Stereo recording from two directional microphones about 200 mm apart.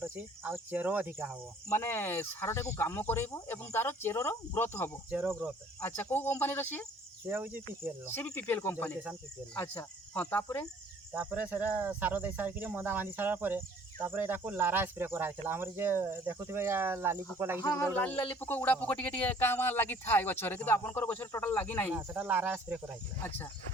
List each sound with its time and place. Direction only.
0.0 s speech: 10° right (ahead or behind)
1.7 s speech: 10° left (ahead or behind)
5.1 s speech: 10° right (ahead or behind)
5.8 s speech: 10° left (ahead or behind)
7.3 s speech: 10° right (ahead or behind)
8.1 s speech: 10° left (ahead or behind)
11.1 s speech: 10° right (ahead or behind)
17.6 s speech: 15° left (ahead or behind)
21.9 s speech: 10° right (ahead or behind)